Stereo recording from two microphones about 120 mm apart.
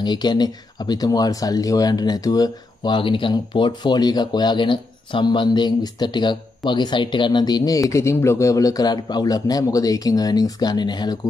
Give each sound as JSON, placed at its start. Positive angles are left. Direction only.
{"t": 0.0, "sound": "speech", "side_deg": 35}